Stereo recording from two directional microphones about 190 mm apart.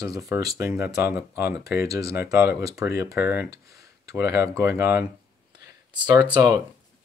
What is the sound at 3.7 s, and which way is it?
Tick-tock, 15° right (ahead or behind).